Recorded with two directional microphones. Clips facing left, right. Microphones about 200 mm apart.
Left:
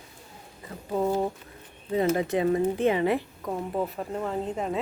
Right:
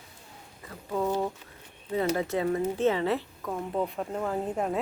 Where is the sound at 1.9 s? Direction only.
20° left (ahead or behind).